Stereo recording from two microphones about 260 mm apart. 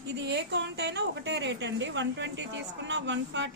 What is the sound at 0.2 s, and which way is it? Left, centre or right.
A woman's voice, right.